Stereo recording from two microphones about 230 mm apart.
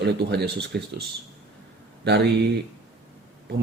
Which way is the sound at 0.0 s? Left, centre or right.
Right.